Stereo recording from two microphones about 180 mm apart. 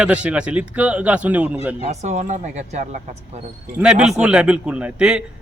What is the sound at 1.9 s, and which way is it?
Speech, 40° right (ahead or behind).